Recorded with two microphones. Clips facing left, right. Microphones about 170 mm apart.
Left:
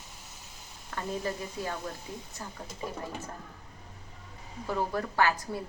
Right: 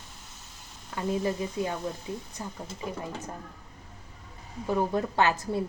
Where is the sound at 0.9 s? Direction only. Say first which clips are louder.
Right 5 dB; 15° right (ahead or behind).